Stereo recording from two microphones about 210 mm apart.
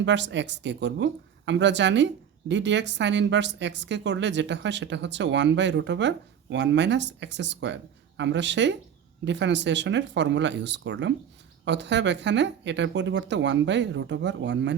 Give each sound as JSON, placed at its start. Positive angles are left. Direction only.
{"t": 0.0, "sound": "speech", "side_deg": -60}